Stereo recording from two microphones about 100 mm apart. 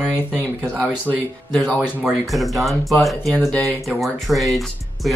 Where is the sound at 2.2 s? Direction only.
Centre (ahead or behind).